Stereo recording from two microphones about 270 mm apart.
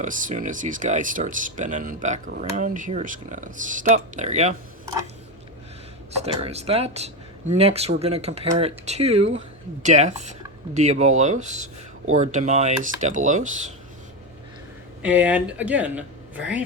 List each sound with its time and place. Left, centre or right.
0.0 s speech: right
6.2 s speech: right
15.0 s speech: centre